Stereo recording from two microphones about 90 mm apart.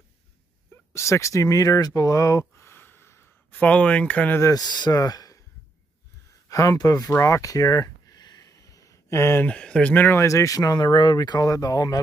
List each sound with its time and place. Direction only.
0.9 s speech: 30° left (ahead or behind)
3.5 s speech: 15° left (ahead or behind)
4.4 s speech: 40° left (ahead or behind)
6.5 s speech: 40° left (ahead or behind)
7.2 s a sound: 35° left (ahead or behind)
9.5 s speech: 10° left (ahead or behind); by 12.0 s 45° left (ahead or behind)